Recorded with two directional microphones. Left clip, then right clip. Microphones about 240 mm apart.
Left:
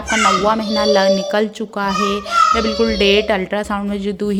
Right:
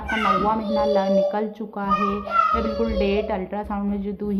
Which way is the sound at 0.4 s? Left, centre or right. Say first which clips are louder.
Left 6 dB; left.